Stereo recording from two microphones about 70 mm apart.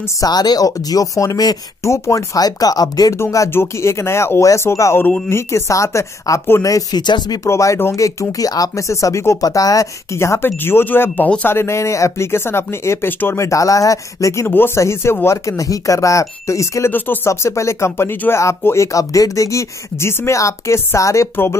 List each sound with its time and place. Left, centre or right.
0.2 s speech: left
1.9 s speech: left
2.4 s speech: left
3.2 s speech: left
3.5 s speech: left
7.0 s speech: left
7.4 s speech: left
9.4 s speech: left
10.1 s speech: left
13.4 s speech: left
16.9 s speech: left
17.3 s speech: left